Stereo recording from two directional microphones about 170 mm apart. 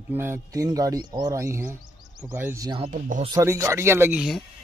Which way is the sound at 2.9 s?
50° right (ahead or behind).